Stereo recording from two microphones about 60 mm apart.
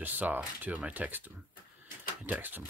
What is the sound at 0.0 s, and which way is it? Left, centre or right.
Speech, right.